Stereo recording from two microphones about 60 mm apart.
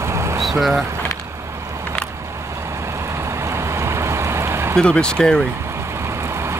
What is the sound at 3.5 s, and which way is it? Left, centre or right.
Vehicle, right.